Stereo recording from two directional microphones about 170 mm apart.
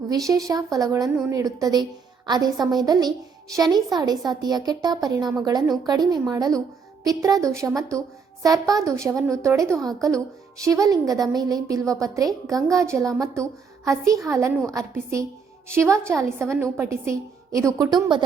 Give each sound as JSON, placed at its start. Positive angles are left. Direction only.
{"t": 0.3, "sound": "a woman's voice", "side_deg": -20}